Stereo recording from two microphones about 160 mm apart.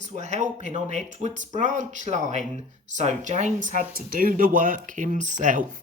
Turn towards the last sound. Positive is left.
turn(degrees=-55)  # may be behind; listen again after turning